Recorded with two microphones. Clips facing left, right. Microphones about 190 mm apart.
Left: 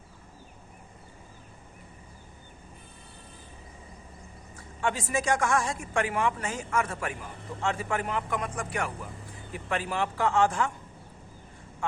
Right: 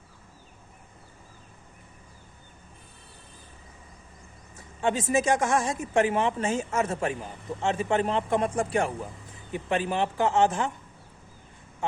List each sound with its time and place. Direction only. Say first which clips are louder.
4.5 s speech: right 4 dB; 20° right (ahead or behind)